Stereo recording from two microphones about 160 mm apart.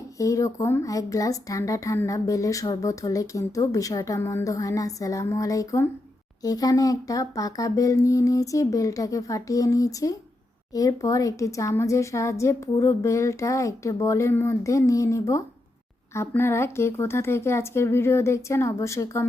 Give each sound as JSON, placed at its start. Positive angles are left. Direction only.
{"t": 0.2, "sound": "speech", "side_deg": 20}